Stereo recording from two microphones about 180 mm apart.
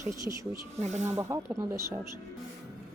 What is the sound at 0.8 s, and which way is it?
Speech, 40° right (ahead or behind).